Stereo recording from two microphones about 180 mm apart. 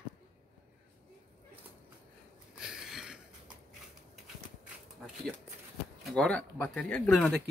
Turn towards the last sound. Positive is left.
turn(degrees=5)  # may be behind; listen again after turning